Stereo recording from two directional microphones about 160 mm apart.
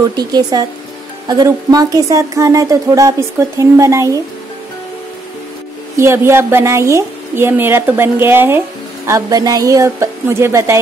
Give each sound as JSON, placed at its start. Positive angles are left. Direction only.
{"t": 0.1, "sound": "speech", "side_deg": -25}
{"t": 5.9, "sound": "a woman's voice", "side_deg": -15}